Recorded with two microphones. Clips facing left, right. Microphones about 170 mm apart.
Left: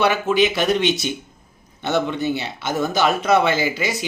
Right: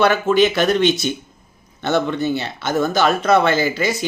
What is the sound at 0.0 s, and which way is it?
Speech, 15° left (ahead or behind).